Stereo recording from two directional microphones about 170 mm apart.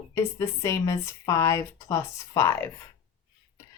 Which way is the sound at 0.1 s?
20° left (ahead or behind).